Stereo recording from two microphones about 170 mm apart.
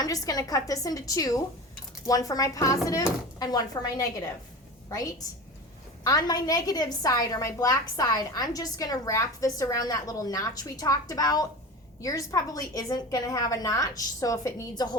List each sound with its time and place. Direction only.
0.0 s a woman's voice: 20° left (ahead or behind)
6.1 s a woman's voice: 25° left (ahead or behind)